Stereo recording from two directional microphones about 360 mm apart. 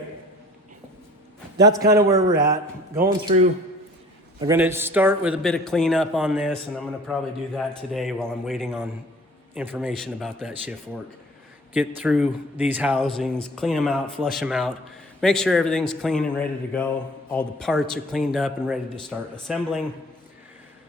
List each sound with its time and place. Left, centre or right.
1.8 s a man's voice: centre
3.0 s speech: centre
4.4 s speech: centre
11.7 s speech: centre